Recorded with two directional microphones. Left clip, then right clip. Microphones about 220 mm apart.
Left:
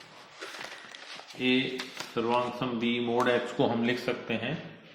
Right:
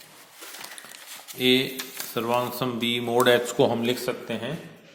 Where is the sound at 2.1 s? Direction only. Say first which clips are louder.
Right 3 dB; 50° right (ahead or behind).